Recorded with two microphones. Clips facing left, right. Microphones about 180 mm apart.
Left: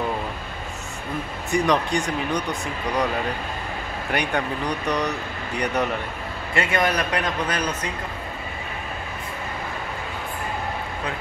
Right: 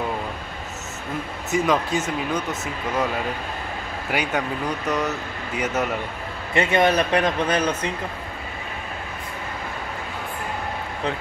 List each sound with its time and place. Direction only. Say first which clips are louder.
1.5 s speech: even; 5° right (ahead or behind)
4.1 s speech: even; 5° right (ahead or behind)
6.5 s speech: right 4 dB; 25° right (ahead or behind)